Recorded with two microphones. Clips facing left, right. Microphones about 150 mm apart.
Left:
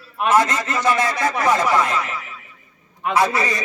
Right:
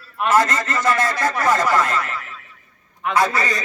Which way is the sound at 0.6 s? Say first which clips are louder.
Even; centre (ahead or behind).